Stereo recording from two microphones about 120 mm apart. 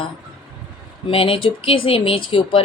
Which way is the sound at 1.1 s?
50° left (ahead or behind).